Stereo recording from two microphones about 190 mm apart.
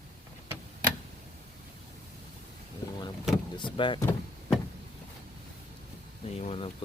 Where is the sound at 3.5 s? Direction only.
25° left (ahead or behind).